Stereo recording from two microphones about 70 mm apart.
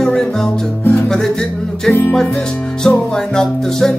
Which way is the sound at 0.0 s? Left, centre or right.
Centre.